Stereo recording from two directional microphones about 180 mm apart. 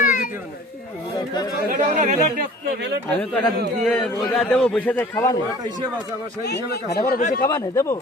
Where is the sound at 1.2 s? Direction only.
20° left (ahead or behind).